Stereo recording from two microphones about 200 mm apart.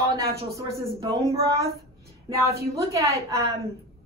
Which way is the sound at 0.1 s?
15° right (ahead or behind).